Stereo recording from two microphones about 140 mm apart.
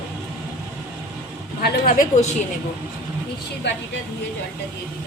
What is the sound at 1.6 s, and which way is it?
Speech, 75° left (ahead or behind).